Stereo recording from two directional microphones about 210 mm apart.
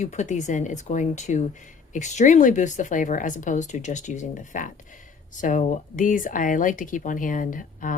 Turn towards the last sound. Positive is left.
turn(degrees=40)  # may be behind; listen again after turning